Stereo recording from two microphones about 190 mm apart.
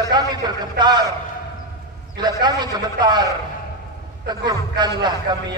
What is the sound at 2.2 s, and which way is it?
A man's voice, 20° right (ahead or behind).